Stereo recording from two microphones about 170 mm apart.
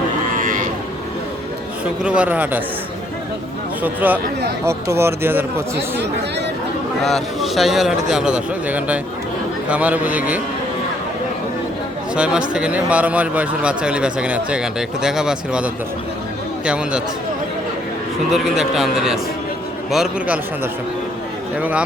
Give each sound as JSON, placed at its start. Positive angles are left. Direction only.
{"t": 0.3, "sound": "cattle", "side_deg": -50}
{"t": 1.8, "sound": "speech", "side_deg": -5}
{"t": 3.8, "sound": "speech", "side_deg": -10}
{"t": 7.0, "sound": "a man's voice", "side_deg": 0}
{"t": 12.1, "sound": "a man's voice", "side_deg": -5}
{"t": 18.3, "sound": "a man's voice", "side_deg": 0}
{"t": 21.6, "sound": "speech", "side_deg": -10}